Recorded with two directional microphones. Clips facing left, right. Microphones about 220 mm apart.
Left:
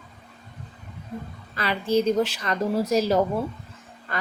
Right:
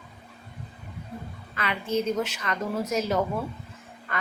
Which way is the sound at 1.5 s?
35° left (ahead or behind).